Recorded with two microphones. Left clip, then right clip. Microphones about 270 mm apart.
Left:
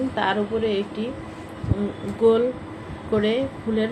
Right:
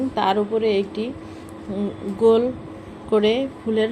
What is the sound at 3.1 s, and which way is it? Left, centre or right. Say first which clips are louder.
Speech: right 3 dB; right.